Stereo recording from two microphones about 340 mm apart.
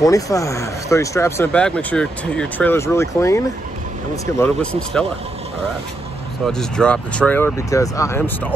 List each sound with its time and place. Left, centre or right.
0.0 s speech: centre
6.4 s speech: centre